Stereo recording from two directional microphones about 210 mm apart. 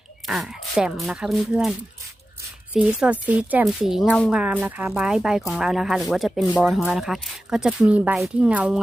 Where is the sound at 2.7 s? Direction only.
5° right (ahead or behind).